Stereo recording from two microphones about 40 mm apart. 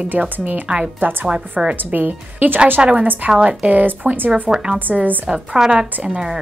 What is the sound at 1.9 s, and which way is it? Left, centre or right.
Speech, right.